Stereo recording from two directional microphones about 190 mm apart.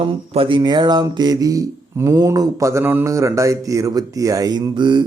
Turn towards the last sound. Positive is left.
turn(degrees=-25)  # may be behind; listen again after turning